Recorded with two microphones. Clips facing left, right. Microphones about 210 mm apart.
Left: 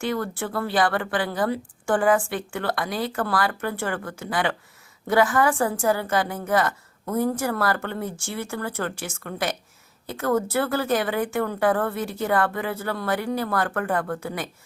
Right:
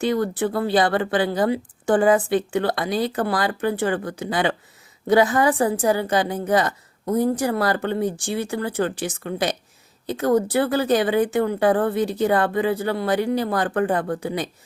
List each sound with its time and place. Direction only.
0.0 s speech: 20° right (ahead or behind)